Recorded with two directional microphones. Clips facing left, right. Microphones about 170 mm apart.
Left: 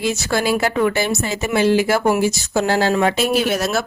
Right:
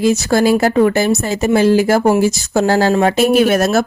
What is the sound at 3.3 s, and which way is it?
Speech, 50° right (ahead or behind).